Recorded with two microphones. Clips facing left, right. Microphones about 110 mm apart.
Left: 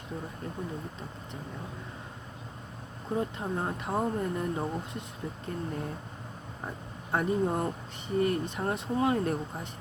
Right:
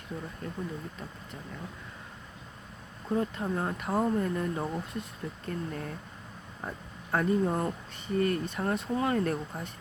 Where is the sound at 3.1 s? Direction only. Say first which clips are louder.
Right 1 dB; 20° left (ahead or behind).